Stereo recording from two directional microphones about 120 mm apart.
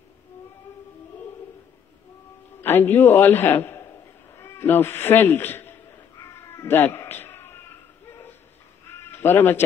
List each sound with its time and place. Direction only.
2.6 s a man's voice: 15° left (ahead or behind)
6.1 s cat: 25° left (ahead or behind)
8.1 s a sound: 20° left (ahead or behind)